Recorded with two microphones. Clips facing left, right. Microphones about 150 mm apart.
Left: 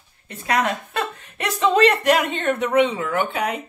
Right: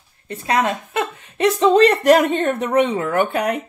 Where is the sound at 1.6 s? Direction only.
35° right (ahead or behind).